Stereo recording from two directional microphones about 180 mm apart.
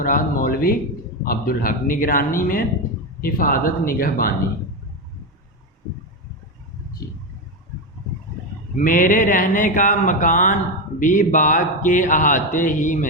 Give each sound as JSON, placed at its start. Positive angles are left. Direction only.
{"t": 0.0, "sound": "speech", "side_deg": 50}
{"t": 8.7, "sound": "speech", "side_deg": 50}